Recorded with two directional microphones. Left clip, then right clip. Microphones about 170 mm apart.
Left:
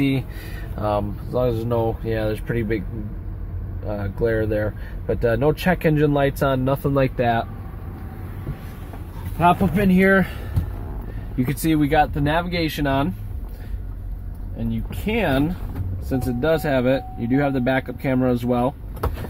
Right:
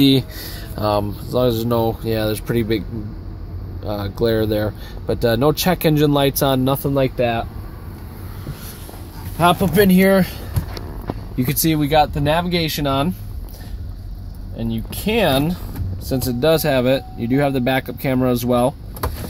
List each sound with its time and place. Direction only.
0.7 s speech: 30° right (ahead or behind)
3.8 s speech: 25° right (ahead or behind)
6.8 s speech: 10° right (ahead or behind)
9.4 s speech: 55° right (ahead or behind)
9.8 s speech: 30° right (ahead or behind)
11.3 s speech: 20° right (ahead or behind)
14.7 s speech: 30° right (ahead or behind)